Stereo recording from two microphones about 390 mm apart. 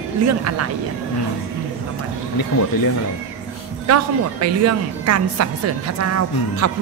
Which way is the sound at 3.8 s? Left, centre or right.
Right.